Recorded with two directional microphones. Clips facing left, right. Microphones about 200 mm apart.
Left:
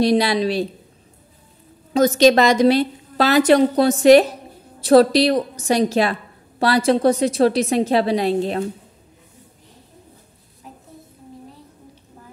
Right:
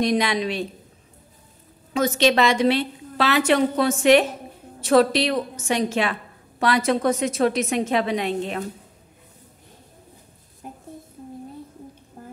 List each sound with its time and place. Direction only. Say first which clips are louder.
0.0 s a woman's voice: left 5 dB; 35° left (ahead or behind)
2.0 s a woman's voice: left 6 dB; 40° left (ahead or behind)
10.6 s a sound: right 3 dB; 50° right (ahead or behind)